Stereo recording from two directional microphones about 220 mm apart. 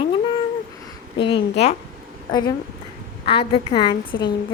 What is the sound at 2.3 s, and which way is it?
A woman's voice, 20° left (ahead or behind).